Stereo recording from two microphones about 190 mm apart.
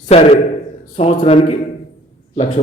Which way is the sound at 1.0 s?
35° left (ahead or behind).